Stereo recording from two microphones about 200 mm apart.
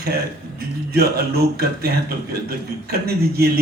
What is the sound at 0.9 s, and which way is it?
A man's voice, 50° right (ahead or behind).